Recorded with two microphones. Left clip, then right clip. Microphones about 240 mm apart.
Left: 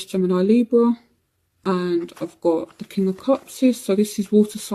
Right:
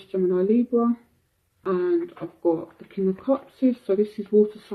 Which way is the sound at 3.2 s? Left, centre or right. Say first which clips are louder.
Left 6 dB; left.